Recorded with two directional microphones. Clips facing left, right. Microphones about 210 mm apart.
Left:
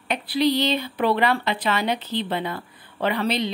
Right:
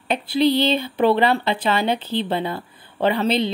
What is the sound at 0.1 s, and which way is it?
Speech, 30° right (ahead or behind).